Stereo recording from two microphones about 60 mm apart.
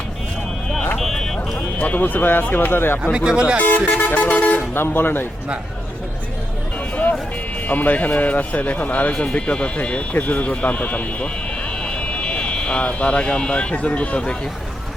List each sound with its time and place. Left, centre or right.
0.9 s vehicle: centre
1.8 s speech: left
3.0 s speech: centre
3.6 s speech: left
4.7 s speech: left
6.9 s vehicle: left
7.7 s speech: left